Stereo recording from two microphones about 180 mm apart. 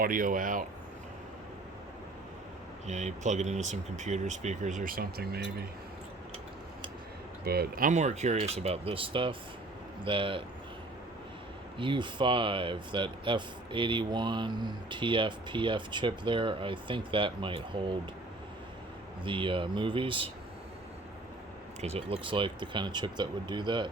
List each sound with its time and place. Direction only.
0.0 s speech: 50° right (ahead or behind)
2.8 s speech: 40° right (ahead or behind); by 5.6 s 60° right (ahead or behind)
7.4 s speech: 60° right (ahead or behind); by 10.4 s 30° right (ahead or behind)
11.8 s speech: 25° right (ahead or behind)
19.2 s speech: 30° right (ahead or behind)
21.8 s speech: 35° right (ahead or behind)